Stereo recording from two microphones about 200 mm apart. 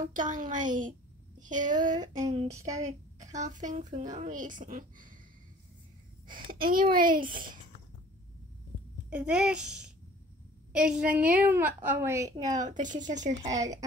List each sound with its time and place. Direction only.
0.0 s speech: 40° right (ahead or behind)
1.8 s child singing: 20° right (ahead or behind)
2.5 s a woman's voice: 15° right (ahead or behind)
3.2 s speech: 35° right (ahead or behind)
6.6 s a child's voice: 45° right (ahead or behind)
9.1 s a child's voice: 5° right (ahead or behind)
12.5 s speech: 40° right (ahead or behind)
13.2 s a woman's voice: 15° right (ahead or behind)